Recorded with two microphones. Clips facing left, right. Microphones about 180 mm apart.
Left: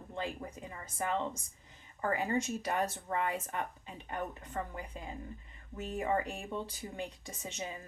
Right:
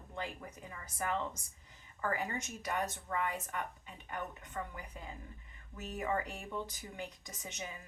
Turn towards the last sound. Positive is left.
turn(degrees=30)  # may be behind; listen again after turning